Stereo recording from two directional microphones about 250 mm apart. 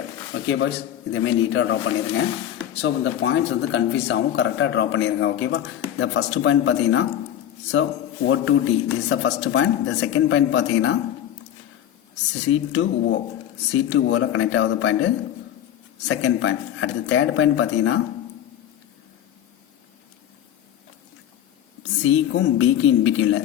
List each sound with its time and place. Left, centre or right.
0.3 s speech: left
2.8 s speech: left
12.5 s speech: left
22.0 s speech: left